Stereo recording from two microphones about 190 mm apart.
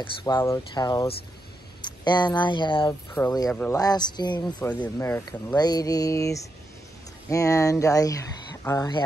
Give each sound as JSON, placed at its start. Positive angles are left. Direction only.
{"t": 0.0, "sound": "speech", "side_deg": 25}
{"t": 3.4, "sound": "speech", "side_deg": 5}
{"t": 3.7, "sound": "speech", "side_deg": 20}
{"t": 4.6, "sound": "speech", "side_deg": 5}